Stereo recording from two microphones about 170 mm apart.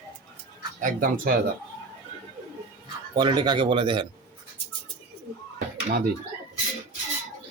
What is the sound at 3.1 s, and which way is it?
Speech, 25° right (ahead or behind).